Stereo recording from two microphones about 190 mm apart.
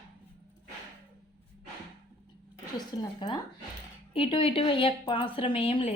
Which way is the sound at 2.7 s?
25° left (ahead or behind).